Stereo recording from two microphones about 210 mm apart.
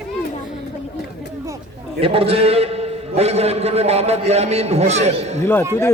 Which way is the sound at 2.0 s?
25° right (ahead or behind).